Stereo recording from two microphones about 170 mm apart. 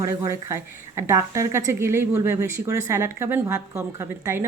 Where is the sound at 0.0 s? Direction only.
15° right (ahead or behind).